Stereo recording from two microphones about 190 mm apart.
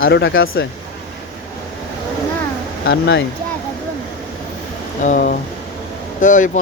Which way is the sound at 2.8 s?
65° left (ahead or behind).